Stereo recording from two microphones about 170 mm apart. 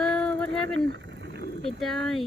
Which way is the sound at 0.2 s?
5° left (ahead or behind).